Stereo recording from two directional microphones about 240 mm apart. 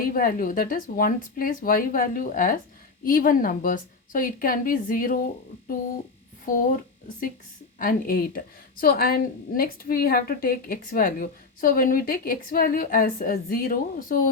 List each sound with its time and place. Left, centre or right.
0.0 s a woman's voice: left
7.8 s a woman's voice: left